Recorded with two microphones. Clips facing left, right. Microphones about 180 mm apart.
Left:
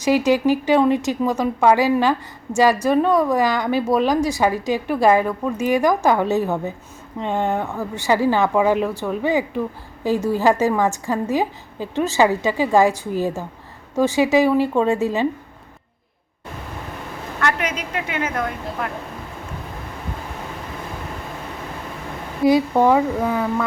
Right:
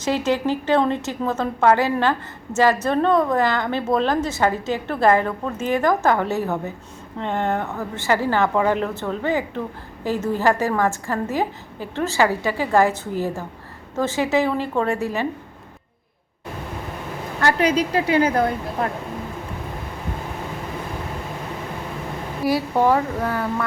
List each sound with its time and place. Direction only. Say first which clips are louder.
0.0 s a woman's voice: left 4 dB; 10° left (ahead or behind)
17.4 s a woman's voice: right 5 dB; 35° right (ahead or behind)
22.4 s a woman's voice: left 4 dB; 15° left (ahead or behind)